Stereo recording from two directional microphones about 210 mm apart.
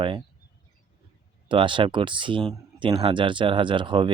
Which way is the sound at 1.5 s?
25° right (ahead or behind).